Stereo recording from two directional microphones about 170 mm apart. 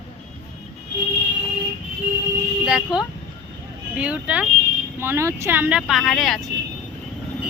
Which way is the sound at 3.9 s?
5° right (ahead or behind).